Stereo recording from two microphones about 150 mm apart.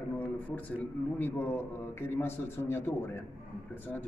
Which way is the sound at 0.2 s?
10° left (ahead or behind).